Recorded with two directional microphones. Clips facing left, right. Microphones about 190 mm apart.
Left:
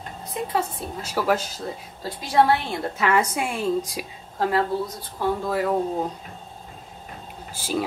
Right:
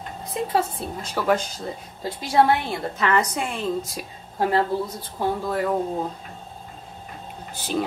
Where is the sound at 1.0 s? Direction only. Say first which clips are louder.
Right 1 dB; 5° left (ahead or behind).